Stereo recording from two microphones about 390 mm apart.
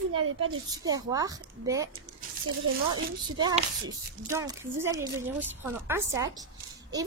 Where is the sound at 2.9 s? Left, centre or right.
Centre.